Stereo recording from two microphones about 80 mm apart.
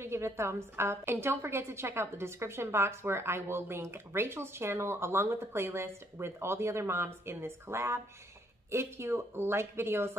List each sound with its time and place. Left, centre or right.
0.0 s a woman's voice: right